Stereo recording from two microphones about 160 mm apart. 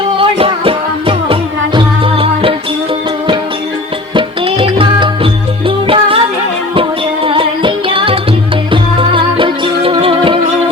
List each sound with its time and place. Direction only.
0.2 s music: 35° right (ahead or behind)
4.1 s music: 30° right (ahead or behind)
7.3 s music: 35° right (ahead or behind)